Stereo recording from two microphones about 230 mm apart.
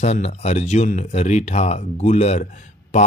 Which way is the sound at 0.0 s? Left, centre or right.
Left.